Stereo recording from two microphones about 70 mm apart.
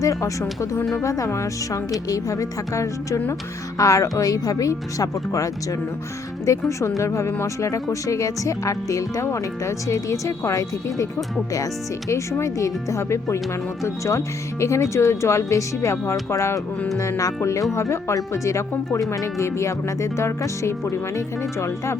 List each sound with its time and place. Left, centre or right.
0.0 s speech: left
4.2 s speech: left